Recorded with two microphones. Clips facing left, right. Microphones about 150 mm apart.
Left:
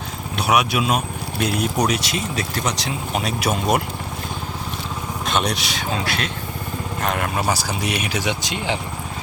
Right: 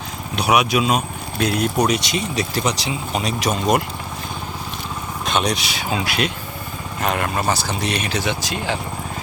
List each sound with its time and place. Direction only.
0.3 s speech: centre (ahead or behind)
1.7 s speech: 10° right (ahead or behind)
5.2 s speech: centre (ahead or behind)
7.0 s speech: centre (ahead or behind); by 8.8 s 20° left (ahead or behind)